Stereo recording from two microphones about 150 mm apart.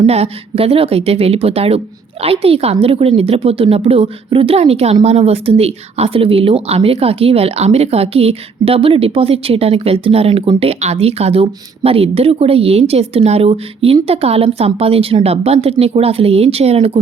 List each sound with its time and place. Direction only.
0.0 s speech: 40° right (ahead or behind)